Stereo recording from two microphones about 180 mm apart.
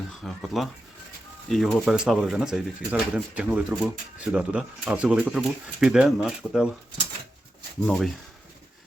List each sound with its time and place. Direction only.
0.2 s speech: centre (ahead or behind)
7.9 s speech: centre (ahead or behind)